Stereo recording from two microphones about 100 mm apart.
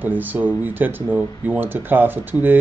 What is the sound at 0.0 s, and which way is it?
Speech, 20° right (ahead or behind).